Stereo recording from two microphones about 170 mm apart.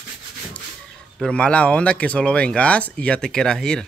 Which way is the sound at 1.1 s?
5° left (ahead or behind).